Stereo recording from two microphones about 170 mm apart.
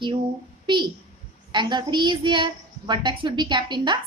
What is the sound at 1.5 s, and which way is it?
A woman's voice, 25° right (ahead or behind).